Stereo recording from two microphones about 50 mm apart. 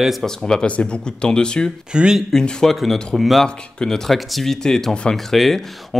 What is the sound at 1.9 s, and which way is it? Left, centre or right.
Speech, centre.